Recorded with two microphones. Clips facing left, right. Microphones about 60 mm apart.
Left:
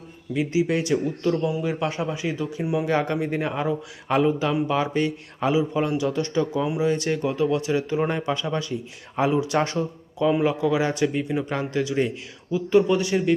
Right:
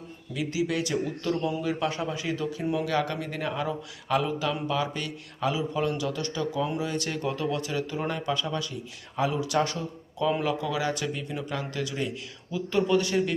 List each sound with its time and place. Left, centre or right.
0.3 s speech: left